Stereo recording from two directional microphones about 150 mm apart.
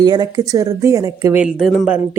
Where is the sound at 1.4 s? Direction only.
5° right (ahead or behind).